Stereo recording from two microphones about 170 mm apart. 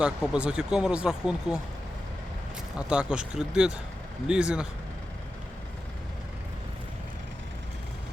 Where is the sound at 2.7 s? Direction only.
5° right (ahead or behind).